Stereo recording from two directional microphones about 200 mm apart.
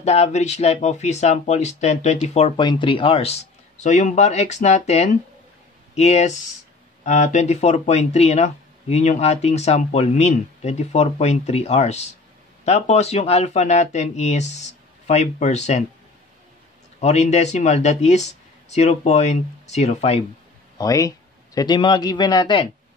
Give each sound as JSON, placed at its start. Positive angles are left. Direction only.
{"t": 0.0, "sound": "speech", "side_deg": 35}
{"t": 17.0, "sound": "speech", "side_deg": 35}
{"t": 20.7, "sound": "speech", "side_deg": 15}